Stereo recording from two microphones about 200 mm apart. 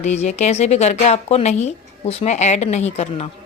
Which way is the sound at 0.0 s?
35° left (ahead or behind).